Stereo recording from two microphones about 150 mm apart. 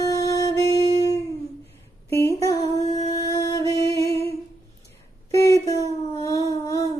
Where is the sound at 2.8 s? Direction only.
25° left (ahead or behind).